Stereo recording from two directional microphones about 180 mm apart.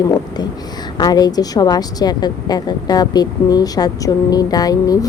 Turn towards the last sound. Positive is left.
turn(degrees=20)  # may be behind; listen again after turning